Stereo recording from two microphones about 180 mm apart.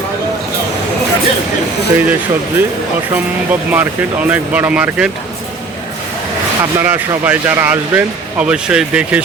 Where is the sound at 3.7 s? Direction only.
10° right (ahead or behind).